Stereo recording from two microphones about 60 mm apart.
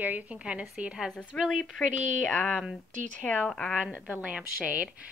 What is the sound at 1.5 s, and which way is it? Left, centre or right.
Speech, centre.